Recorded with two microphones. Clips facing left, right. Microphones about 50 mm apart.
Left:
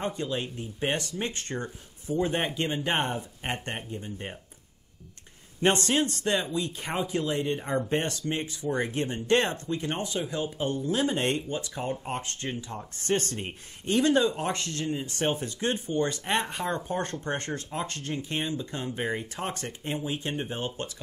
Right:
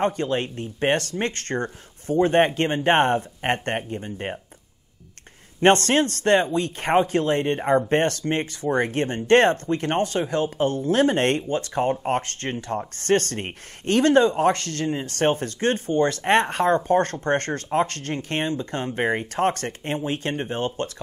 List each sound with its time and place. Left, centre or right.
0.0 s speech: right
5.6 s speech: right
11.9 s speech: right
12.2 s speech: right